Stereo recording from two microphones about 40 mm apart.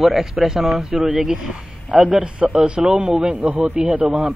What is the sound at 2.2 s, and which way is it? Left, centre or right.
Speech, right.